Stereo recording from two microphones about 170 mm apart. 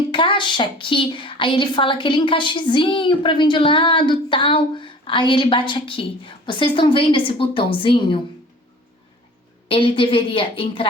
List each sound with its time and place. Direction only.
0.1 s a woman's voice: 30° left (ahead or behind)
9.6 s a woman's voice: 30° left (ahead or behind)